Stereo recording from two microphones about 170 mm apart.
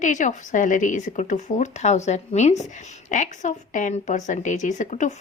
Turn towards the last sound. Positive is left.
turn(degrees=45)  # may be behind; listen again after turning